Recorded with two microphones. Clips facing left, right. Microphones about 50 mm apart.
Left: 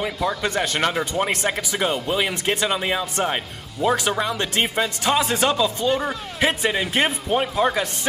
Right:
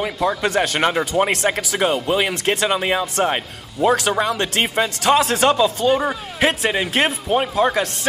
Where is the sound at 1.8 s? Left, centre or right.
Centre.